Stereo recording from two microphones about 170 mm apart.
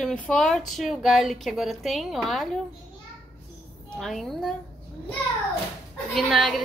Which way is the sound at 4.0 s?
Centre (ahead or behind).